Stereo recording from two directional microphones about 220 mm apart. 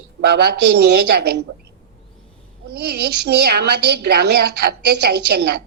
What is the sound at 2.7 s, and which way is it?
A woman's voice, 45° right (ahead or behind).